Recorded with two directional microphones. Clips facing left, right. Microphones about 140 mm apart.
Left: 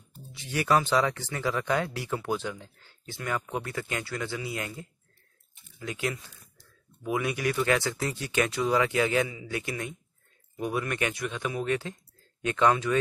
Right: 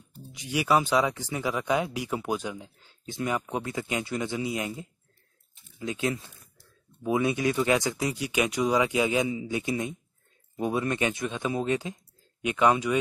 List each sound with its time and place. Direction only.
0.3 s speech: 15° right (ahead or behind)